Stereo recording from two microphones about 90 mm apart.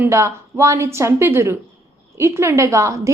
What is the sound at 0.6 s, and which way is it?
A woman's voice, 35° right (ahead or behind).